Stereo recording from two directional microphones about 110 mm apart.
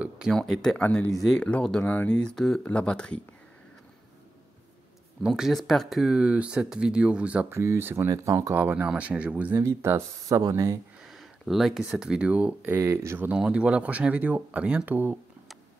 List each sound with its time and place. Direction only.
0.3 s speech: 5° left (ahead or behind)
5.2 s speech: 5° right (ahead or behind)
7.5 s speech: 25° right (ahead or behind)
8.5 s speech: 15° right (ahead or behind)
9.6 s speech: 25° right (ahead or behind)
11.1 s a sound: centre (ahead or behind)
11.9 s speech: 5° right (ahead or behind)
13.4 s speech: 10° right (ahead or behind)